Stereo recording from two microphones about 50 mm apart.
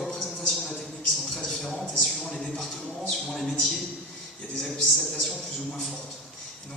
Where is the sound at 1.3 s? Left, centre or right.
Centre.